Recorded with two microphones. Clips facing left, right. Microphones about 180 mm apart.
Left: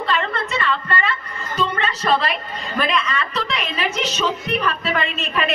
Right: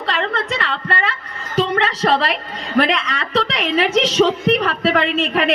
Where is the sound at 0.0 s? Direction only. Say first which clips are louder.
Right 1 dB; 75° right (ahead or behind).